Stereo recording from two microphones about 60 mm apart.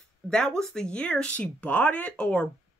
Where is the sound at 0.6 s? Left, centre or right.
Centre.